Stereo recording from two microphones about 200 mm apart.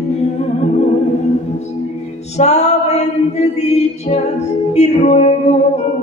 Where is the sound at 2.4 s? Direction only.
35° left (ahead or behind).